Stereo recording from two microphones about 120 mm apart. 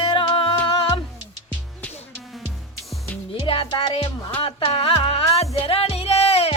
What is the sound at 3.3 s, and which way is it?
Music, 45° left (ahead or behind).